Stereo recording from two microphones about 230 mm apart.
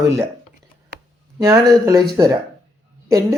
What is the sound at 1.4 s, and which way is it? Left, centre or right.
Speech, centre.